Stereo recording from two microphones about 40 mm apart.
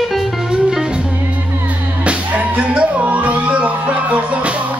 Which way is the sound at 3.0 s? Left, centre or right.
Right.